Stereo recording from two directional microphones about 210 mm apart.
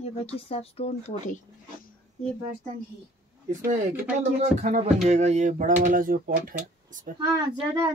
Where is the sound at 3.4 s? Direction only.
40° right (ahead or behind).